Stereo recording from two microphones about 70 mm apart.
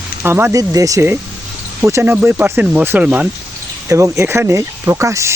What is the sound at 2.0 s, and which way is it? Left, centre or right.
Speech, right.